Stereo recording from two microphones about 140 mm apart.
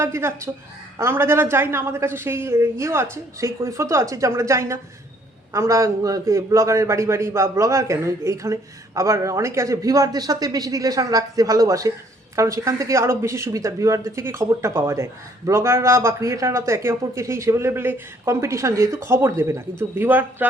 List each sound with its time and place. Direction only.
0.0 s speech: 20° right (ahead or behind)